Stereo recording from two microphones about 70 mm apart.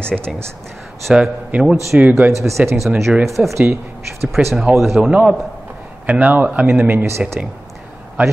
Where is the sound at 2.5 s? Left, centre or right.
Right.